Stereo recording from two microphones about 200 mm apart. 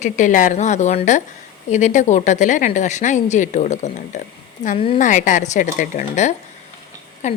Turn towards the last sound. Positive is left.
turn(degrees=35)  # may be behind; listen again after turning